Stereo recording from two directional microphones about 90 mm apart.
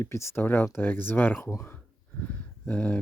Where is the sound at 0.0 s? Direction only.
30° left (ahead or behind).